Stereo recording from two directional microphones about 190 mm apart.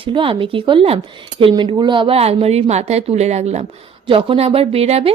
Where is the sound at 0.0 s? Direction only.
25° right (ahead or behind).